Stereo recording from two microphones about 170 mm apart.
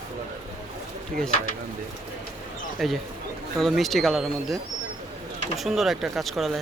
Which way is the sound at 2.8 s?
Centre (ahead or behind).